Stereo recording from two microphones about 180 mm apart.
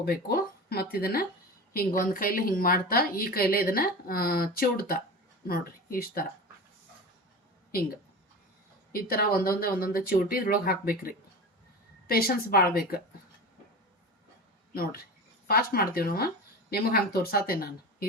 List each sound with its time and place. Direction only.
0.0 s a woman's voice: 55° left (ahead or behind)
8.9 s a woman's voice: 55° left (ahead or behind)
14.7 s a woman's voice: 55° left (ahead or behind)